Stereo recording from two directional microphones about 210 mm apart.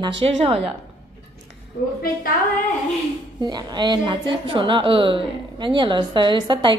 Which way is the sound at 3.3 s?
20° right (ahead or behind).